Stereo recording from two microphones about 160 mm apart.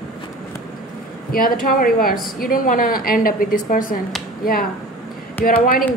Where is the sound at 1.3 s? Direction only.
65° left (ahead or behind).